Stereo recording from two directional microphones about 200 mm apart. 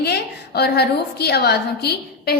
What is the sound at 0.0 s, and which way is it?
A woman's voice, 55° left (ahead or behind).